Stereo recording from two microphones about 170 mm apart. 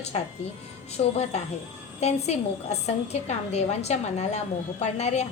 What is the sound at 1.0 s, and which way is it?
A woman's voice, 35° left (ahead or behind).